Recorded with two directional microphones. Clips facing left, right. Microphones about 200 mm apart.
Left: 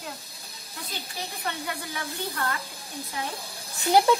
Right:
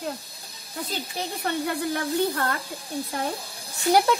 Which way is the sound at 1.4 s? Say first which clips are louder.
Right 8 dB; 50° right (ahead or behind).